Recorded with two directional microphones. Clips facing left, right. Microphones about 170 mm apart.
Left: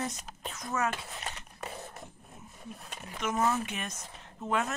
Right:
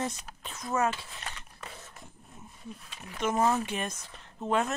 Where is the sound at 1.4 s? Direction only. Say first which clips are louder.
Left 5 dB; 45° left (ahead or behind).